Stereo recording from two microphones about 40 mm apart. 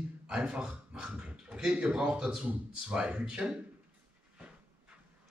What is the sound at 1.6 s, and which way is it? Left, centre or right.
Speech, right.